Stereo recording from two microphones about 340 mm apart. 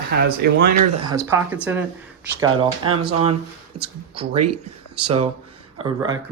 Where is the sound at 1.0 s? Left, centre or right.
Centre.